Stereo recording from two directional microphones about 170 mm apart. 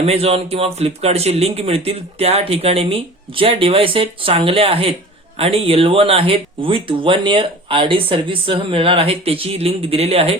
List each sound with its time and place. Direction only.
0.0 s speech: 35° right (ahead or behind)